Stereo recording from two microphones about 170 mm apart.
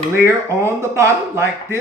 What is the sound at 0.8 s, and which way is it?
A man's voice, 15° right (ahead or behind).